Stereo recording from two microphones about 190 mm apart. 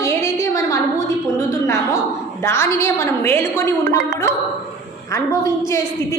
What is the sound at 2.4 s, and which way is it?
A woman's voice, 15° left (ahead or behind).